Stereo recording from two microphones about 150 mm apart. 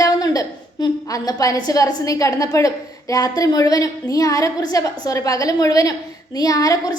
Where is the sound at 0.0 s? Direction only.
25° left (ahead or behind).